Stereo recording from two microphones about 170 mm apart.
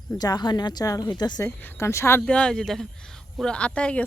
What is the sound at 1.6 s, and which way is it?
A man's voice, 15° left (ahead or behind).